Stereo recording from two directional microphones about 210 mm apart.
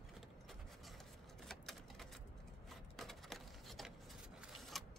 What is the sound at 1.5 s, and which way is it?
Typewriter, centre (ahead or behind).